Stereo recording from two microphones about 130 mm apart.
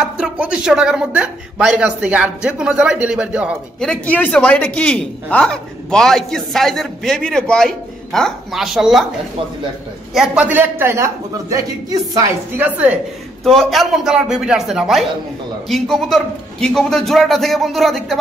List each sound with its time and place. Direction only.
0.0 s a man's voice: 10° right (ahead or behind)
3.8 s a man's voice: 10° left (ahead or behind)
10.1 s a man's voice: 5° right (ahead or behind); by 12.4 s 30° right (ahead or behind)
12.5 s a man's voice: 15° right (ahead or behind)
13.4 s a man's voice: centre (ahead or behind)